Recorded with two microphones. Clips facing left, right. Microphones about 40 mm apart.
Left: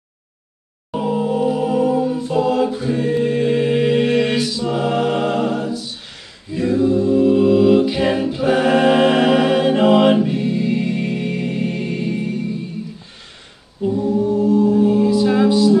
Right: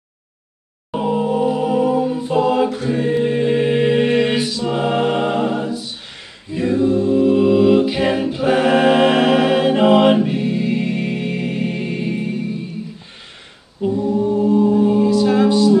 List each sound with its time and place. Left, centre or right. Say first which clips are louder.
0.9 s music: right 1 dB; centre
2.9 s choir: even; centre
4.6 s a capella: right 1 dB; right
13.8 s a capella: even; centre
14.1 s music: even; right
15.0 s music: right 1 dB; centre
15.3 s music: even; centre